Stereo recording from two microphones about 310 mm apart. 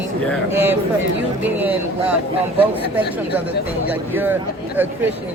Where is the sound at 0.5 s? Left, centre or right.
Centre.